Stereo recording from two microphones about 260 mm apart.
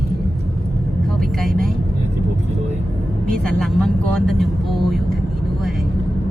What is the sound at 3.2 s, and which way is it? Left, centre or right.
Speech, centre.